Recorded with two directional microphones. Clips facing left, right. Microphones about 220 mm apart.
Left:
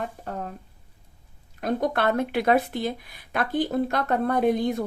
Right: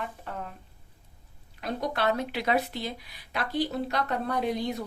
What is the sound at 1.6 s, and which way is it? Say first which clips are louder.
A woman's voice: left 4 dB; 50° left (ahead or behind).